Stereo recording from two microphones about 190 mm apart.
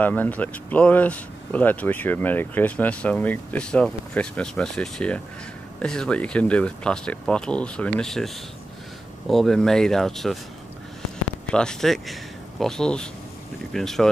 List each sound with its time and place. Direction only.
0.0 s speech: 10° left (ahead or behind)
9.3 s speech: centre (ahead or behind)
11.5 s speech: 5° left (ahead or behind)